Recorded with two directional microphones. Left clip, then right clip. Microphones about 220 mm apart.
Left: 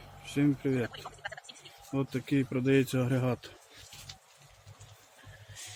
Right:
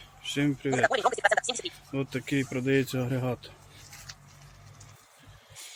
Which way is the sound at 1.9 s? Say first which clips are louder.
Even; 45° left (ahead or behind).